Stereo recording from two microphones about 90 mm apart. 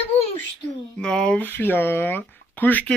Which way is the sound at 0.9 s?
10° left (ahead or behind).